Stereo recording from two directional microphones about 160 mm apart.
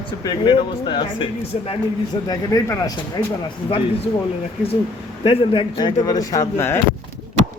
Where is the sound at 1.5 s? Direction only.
45° left (ahead or behind).